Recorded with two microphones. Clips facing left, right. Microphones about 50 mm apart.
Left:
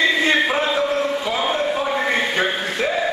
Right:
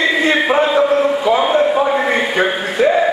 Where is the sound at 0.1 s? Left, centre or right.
Centre.